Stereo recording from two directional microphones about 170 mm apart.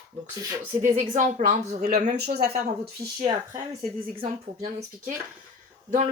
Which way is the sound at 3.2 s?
20° right (ahead or behind).